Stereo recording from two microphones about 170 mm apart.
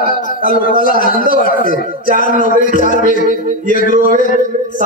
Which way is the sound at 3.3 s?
50° right (ahead or behind).